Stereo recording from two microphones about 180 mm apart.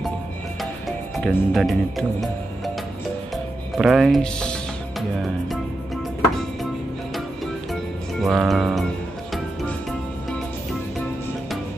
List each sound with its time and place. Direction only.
0.6 s music: centre (ahead or behind)
3.7 s speech: centre (ahead or behind)
8.2 s speech: centre (ahead or behind)
9.3 s music: centre (ahead or behind)